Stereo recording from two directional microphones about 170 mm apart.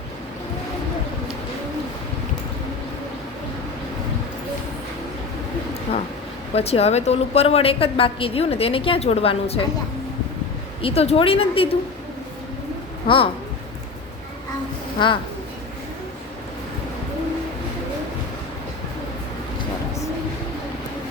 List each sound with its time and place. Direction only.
6.5 s a woman's voice: 35° left (ahead or behind)
10.8 s a woman's voice: 35° left (ahead or behind)
13.1 s a woman's voice: 30° left (ahead or behind)
14.9 s a woman's voice: 30° left (ahead or behind)